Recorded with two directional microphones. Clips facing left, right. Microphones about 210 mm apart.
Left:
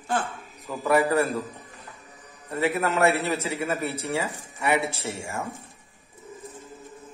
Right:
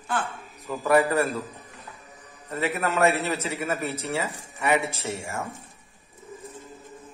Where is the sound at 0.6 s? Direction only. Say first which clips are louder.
Right 1 dB; 15° left (ahead or behind).